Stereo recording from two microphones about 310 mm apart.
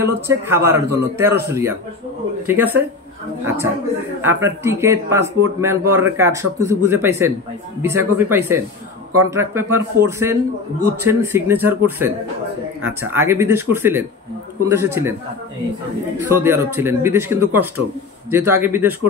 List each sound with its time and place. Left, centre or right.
0.0 s a man's voice: centre
4.2 s a man's voice: centre
16.3 s a man's voice: centre